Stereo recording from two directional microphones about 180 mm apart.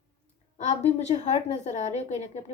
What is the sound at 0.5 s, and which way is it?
Speech, 40° left (ahead or behind).